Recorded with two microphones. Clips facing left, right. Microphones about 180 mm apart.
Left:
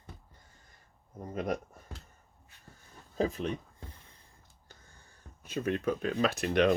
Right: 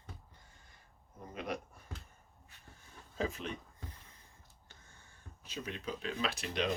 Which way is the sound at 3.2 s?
35° left (ahead or behind).